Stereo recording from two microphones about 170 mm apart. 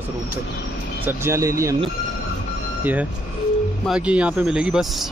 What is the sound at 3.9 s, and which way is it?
Speech, 5° right (ahead or behind).